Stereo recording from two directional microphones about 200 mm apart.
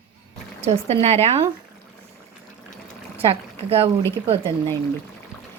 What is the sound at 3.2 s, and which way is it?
Speech, 30° right (ahead or behind).